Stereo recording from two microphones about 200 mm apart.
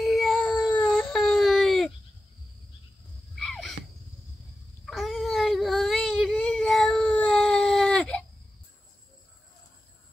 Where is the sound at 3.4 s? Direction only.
Centre (ahead or behind).